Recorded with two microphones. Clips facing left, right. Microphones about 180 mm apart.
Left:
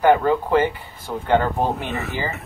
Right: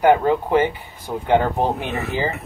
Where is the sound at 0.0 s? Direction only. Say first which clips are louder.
Right 1 dB; 15° right (ahead or behind).